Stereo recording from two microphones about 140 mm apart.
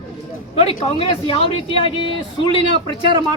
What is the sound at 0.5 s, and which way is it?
A man's voice, 45° left (ahead or behind).